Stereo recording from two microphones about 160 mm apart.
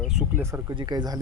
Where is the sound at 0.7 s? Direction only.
30° right (ahead or behind).